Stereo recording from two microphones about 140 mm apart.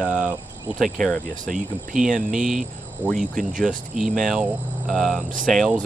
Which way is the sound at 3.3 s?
75° right (ahead or behind).